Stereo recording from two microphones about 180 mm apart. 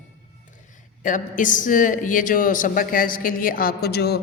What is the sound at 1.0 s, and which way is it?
A man's voice, 45° left (ahead or behind).